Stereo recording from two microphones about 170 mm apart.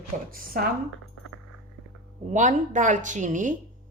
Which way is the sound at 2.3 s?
45° right (ahead or behind).